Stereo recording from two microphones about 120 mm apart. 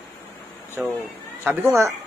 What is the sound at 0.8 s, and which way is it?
Speech, 10° right (ahead or behind).